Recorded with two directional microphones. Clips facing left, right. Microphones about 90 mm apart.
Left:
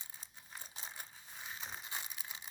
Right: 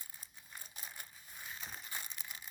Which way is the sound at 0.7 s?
25° left (ahead or behind).